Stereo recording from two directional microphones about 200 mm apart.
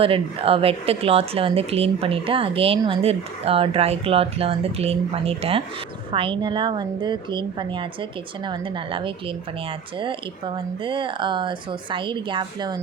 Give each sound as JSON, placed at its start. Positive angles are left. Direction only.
{"t": 0.0, "sound": "speech", "side_deg": -30}